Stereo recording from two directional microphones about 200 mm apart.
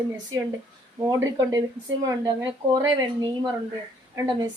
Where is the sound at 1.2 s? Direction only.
20° right (ahead or behind).